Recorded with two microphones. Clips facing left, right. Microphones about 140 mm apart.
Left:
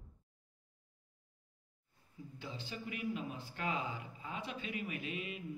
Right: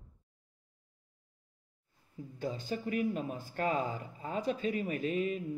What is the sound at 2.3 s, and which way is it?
Speech, 45° right (ahead or behind).